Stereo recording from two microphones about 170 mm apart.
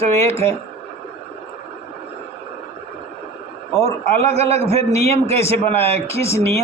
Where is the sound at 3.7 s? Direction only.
20° left (ahead or behind).